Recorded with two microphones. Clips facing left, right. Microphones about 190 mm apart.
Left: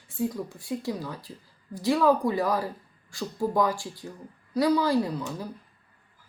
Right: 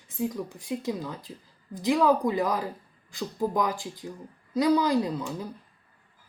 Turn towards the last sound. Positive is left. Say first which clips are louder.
# even
turn(degrees=-20)  # may be behind; listen again after turning